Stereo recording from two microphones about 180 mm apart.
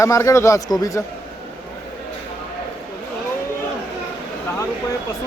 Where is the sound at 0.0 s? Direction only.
15° left (ahead or behind).